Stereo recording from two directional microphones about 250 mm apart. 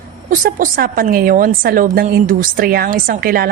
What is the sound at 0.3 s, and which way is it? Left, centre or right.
A woman's voice, right.